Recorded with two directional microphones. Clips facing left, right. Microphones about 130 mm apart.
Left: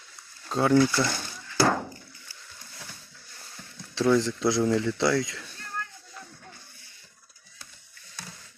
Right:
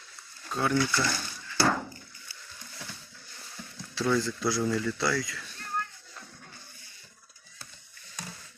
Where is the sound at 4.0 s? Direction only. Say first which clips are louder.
Left 5 dB; 20° left (ahead or behind).